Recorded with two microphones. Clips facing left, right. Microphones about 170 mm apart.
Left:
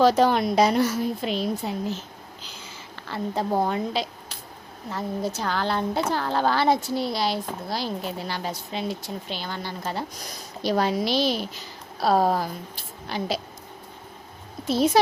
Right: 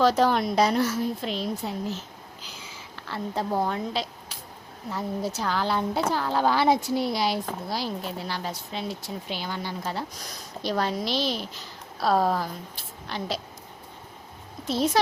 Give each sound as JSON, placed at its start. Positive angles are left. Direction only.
{"t": 0.0, "sound": "a woman's voice", "side_deg": 0}
{"t": 11.9, "sound": "a woman's voice", "side_deg": 30}
{"t": 12.7, "sound": "a woman's voice", "side_deg": 5}
{"t": 14.7, "sound": "speech", "side_deg": 5}